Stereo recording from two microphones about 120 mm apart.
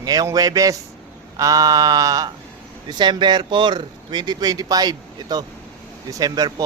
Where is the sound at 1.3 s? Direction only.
30° right (ahead or behind).